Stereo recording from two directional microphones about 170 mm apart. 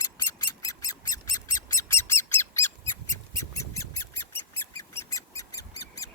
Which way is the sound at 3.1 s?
20° left (ahead or behind).